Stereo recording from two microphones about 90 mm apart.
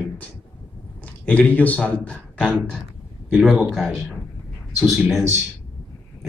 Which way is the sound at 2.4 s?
15° right (ahead or behind).